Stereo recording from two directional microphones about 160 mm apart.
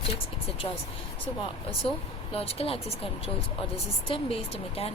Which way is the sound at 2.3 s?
40° left (ahead or behind).